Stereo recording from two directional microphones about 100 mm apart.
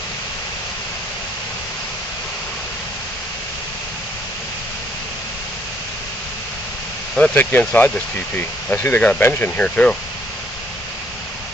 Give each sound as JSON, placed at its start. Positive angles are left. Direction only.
{"t": 7.2, "sound": "speech", "side_deg": 15}